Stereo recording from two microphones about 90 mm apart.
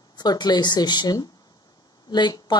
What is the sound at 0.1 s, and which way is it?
Speech, 50° left (ahead or behind).